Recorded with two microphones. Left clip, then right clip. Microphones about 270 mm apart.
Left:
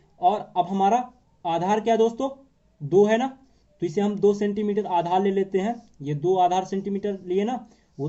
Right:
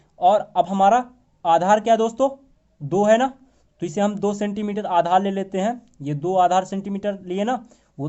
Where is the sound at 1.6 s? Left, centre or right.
Right.